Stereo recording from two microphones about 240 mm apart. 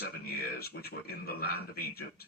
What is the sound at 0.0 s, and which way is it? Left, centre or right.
Speech, left.